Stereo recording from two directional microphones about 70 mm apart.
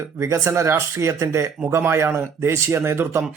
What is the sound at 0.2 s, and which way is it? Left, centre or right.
A man's voice, right.